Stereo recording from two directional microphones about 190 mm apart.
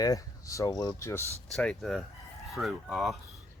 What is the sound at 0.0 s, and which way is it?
Speech, 20° left (ahead or behind).